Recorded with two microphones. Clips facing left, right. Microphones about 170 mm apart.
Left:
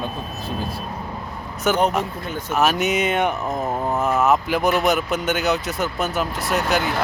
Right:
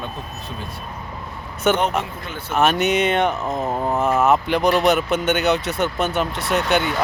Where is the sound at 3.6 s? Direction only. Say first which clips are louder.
Right 1 dB; 10° right (ahead or behind).